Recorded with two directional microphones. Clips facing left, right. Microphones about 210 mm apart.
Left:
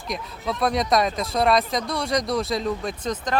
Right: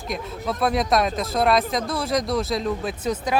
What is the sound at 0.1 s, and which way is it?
Speech, centre (ahead or behind).